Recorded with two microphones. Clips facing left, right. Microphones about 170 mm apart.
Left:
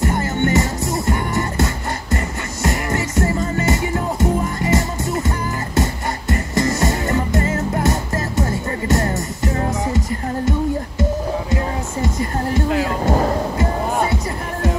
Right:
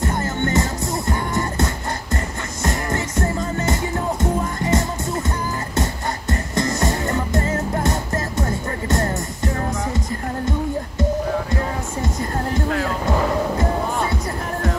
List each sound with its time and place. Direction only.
0.0 s music: centre (ahead or behind)
13.0 s music: 40° left (ahead or behind)